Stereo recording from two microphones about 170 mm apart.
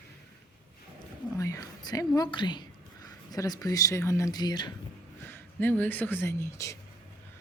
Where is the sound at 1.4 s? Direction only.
20° left (ahead or behind).